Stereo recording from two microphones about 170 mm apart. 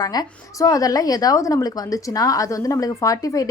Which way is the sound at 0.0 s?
20° left (ahead or behind).